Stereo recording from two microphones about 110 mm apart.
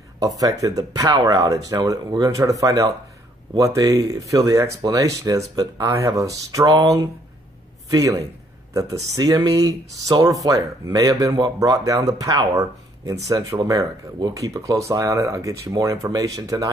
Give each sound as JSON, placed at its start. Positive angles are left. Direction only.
{"t": 0.2, "sound": "speech", "side_deg": -35}
{"t": 7.9, "sound": "speech", "side_deg": -30}